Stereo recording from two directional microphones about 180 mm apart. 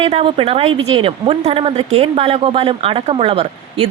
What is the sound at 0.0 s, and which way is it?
A woman's voice, 30° right (ahead or behind).